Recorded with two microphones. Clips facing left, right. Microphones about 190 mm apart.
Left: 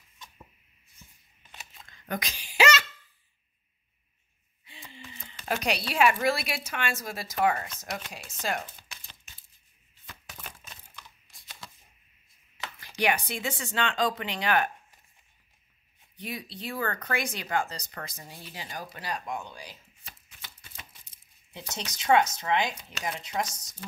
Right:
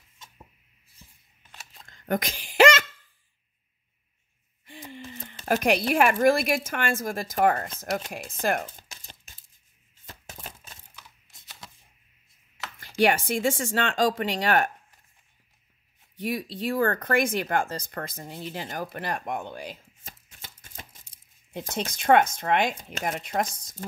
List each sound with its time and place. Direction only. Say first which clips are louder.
1.7 s a sound: right 7 dB; 45° right (ahead or behind)
4.6 s speech: right 8 dB; 50° right (ahead or behind)
10.0 s chopping: right 3 dB; 40° right (ahead or behind)
11.6 s a sound: even; 20° right (ahead or behind)
13.0 s speech: right 6 dB; 50° right (ahead or behind)
16.2 s speech: right 8 dB; 50° right (ahead or behind)
18.5 s chopping: right 6 dB; 50° right (ahead or behind)
21.5 s speech: right 8 dB; 50° right (ahead or behind)